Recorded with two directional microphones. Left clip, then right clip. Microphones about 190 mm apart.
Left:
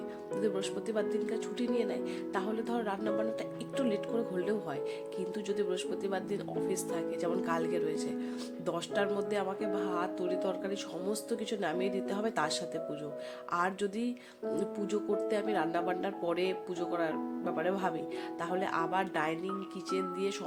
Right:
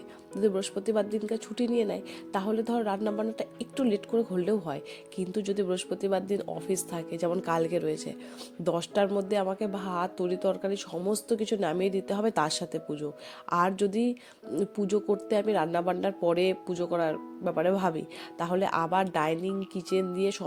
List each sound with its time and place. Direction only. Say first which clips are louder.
0.4 s speech: right 7 dB; 30° right (ahead or behind)